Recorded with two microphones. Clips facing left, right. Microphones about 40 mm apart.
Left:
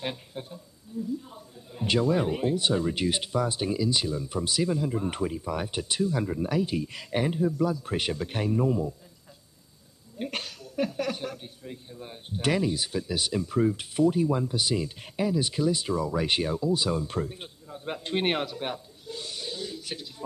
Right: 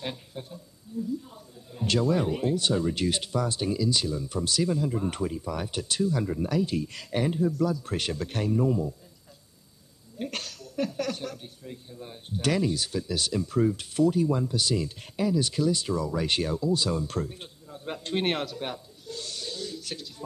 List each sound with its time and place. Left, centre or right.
0.0 s speech: centre
10.1 s speech: centre